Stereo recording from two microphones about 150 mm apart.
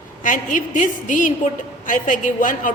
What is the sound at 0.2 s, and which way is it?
A woman's voice, 60° left (ahead or behind).